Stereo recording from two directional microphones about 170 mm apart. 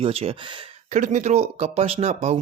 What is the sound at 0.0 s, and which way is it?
Speech, 35° right (ahead or behind).